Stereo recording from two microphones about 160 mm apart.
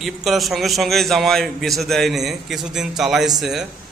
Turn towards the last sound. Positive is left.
turn(degrees=0)  # may be behind; listen again after turning